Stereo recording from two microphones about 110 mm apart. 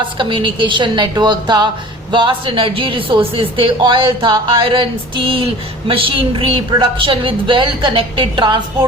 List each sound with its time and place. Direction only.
0.2 s a woman's voice: 50° right (ahead or behind)